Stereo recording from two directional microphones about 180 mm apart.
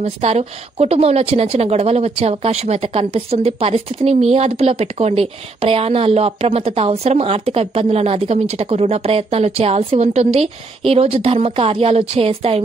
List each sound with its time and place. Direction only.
0.0 s a woman's voice: 35° right (ahead or behind)